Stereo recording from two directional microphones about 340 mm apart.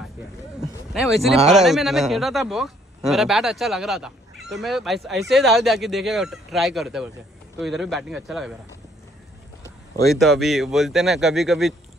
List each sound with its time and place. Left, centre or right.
0.6 s speech: centre
9.6 s a sound: centre
10.4 s speech: centre